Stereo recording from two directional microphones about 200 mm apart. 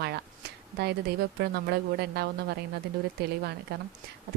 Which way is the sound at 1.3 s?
55° right (ahead or behind).